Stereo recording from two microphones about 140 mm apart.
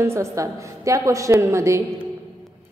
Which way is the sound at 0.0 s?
20° right (ahead or behind).